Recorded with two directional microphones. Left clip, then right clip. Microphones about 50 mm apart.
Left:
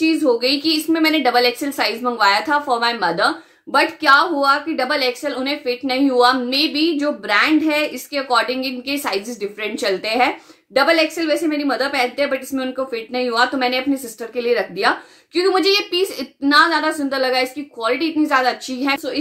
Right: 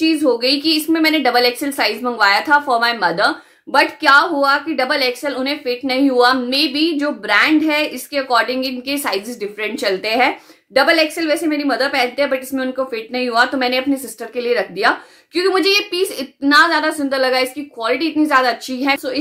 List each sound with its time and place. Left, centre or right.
0.0 s a woman's voice: right